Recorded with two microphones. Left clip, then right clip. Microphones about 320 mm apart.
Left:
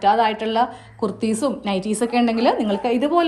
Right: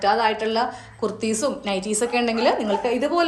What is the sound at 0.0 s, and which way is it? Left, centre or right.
A woman's voice, left.